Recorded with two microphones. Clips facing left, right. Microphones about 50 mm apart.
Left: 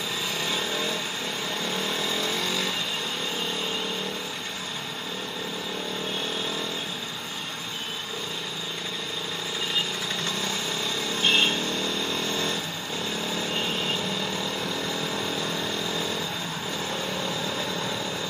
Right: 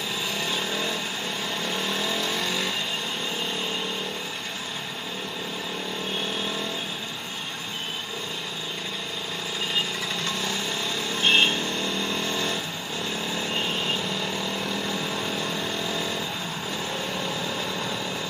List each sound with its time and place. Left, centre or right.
0.5 s vehicle: right
11.1 s vehicle: right